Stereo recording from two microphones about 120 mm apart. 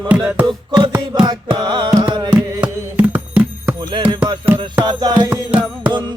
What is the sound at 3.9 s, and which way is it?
Music, 40° right (ahead or behind).